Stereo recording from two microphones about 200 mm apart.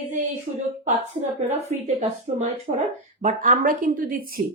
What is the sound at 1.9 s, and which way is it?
A woman's voice, 35° right (ahead or behind).